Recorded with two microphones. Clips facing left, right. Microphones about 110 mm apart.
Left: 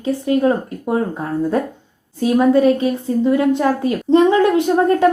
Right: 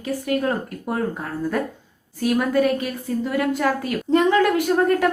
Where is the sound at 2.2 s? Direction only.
25° left (ahead or behind).